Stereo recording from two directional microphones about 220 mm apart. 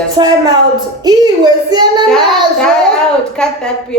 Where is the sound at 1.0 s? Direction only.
20° right (ahead or behind).